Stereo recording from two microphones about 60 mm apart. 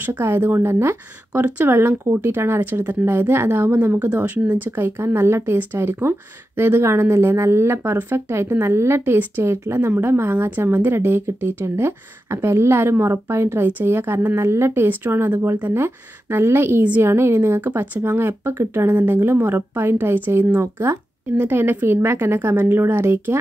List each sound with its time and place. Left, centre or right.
0.2 s speech: right
4.0 s speech: right
4.6 s a woman's voice: right
10.3 s a woman's voice: right